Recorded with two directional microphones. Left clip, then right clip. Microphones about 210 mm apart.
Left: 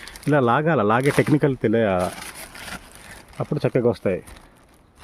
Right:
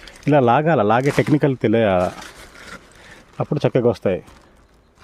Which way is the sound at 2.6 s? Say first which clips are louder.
Left 3 dB; 55° left (ahead or behind).